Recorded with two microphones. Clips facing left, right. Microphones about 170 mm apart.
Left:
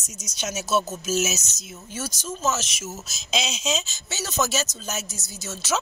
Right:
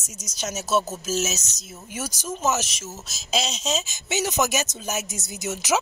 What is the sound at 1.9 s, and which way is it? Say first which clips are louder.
Speech: right 1 dB; 15° right (ahead or behind).